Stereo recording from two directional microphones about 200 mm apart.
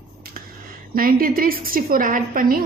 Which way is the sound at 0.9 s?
45° right (ahead or behind).